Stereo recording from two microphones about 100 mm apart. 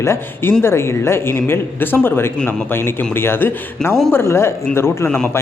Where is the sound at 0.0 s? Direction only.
25° left (ahead or behind).